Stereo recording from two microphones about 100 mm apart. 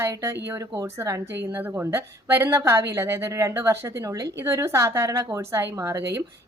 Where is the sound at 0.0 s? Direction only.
30° right (ahead or behind).